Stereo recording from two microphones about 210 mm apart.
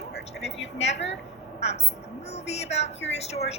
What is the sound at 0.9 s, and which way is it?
Speech, 55° left (ahead or behind).